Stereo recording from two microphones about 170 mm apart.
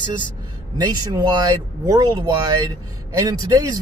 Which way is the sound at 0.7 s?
25° right (ahead or behind).